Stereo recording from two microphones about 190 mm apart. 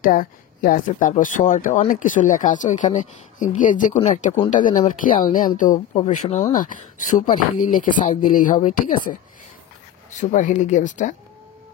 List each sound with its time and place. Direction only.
0.0 s speech: 45° left (ahead or behind)